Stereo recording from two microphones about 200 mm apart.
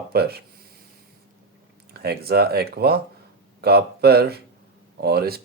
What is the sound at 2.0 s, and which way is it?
Speech, 50° right (ahead or behind).